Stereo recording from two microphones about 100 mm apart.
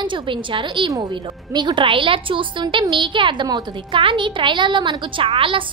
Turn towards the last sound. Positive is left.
turn(degrees=-65)  # may be behind; listen again after turning